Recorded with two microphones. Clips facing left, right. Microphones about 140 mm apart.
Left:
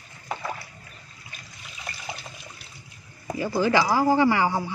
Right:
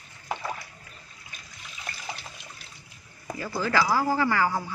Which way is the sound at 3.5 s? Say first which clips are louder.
Left 3 dB; 25° left (ahead or behind).